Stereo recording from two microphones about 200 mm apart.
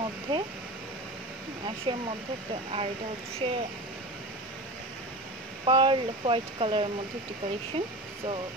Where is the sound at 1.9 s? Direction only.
25° right (ahead or behind).